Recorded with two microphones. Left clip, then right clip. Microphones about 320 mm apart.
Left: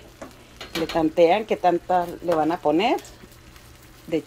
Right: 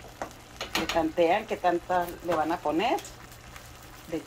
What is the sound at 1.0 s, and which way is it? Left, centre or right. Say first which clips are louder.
Speech: left 7 dB; left.